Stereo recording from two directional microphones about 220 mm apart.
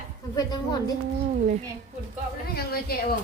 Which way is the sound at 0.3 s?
15° left (ahead or behind).